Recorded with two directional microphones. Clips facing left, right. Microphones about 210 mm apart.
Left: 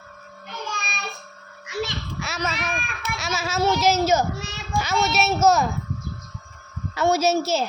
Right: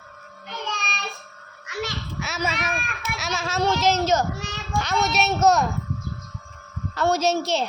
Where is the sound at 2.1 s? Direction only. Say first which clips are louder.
Right 1 dB; centre (ahead or behind).